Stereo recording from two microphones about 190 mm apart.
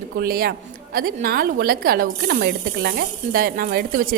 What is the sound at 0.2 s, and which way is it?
Speech, 50° right (ahead or behind).